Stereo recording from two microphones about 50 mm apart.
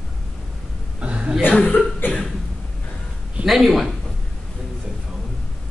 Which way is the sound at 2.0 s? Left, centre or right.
Left.